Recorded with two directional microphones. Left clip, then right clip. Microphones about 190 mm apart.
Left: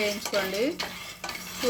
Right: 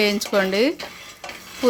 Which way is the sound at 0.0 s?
45° right (ahead or behind).